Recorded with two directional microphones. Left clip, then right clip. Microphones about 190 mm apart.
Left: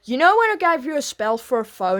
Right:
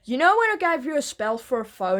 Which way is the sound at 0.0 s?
30° left (ahead or behind).